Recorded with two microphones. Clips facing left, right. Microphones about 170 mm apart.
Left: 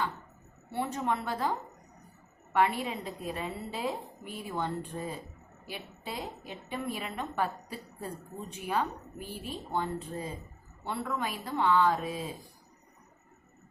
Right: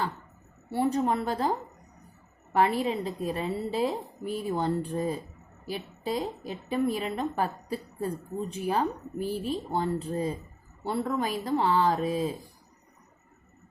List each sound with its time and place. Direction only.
0.7 s a woman's voice: 35° right (ahead or behind)